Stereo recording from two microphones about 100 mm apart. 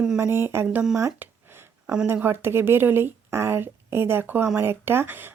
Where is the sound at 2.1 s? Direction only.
20° right (ahead or behind).